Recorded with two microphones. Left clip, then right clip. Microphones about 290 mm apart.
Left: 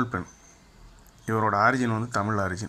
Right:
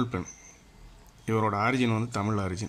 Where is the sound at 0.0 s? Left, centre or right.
Centre.